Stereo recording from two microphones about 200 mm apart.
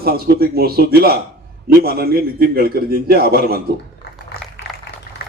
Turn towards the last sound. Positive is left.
turn(degrees=-50)  # may be behind; listen again after turning